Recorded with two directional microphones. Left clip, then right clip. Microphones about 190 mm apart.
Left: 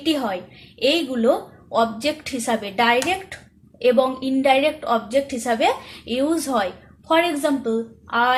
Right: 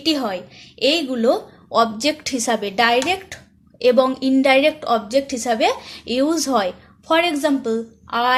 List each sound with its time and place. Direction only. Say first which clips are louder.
0.0 s a woman's voice: right 2 dB; 35° right (ahead or behind)